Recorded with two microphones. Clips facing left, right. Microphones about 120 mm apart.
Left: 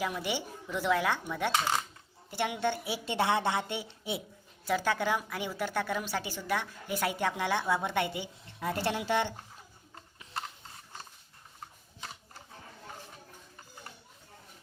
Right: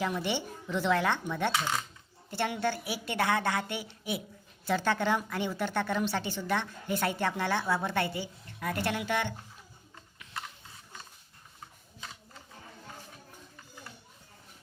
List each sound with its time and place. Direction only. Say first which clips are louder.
0.0 s a woman's voice: right 2 dB; 10° left (ahead or behind); by 4.2 s 25° left (ahead or behind)
4.6 s a woman's voice: right 1 dB; 10° left (ahead or behind); by 9.3 s 30° left (ahead or behind)
9.9 s a sound: left 2 dB; 30° left (ahead or behind)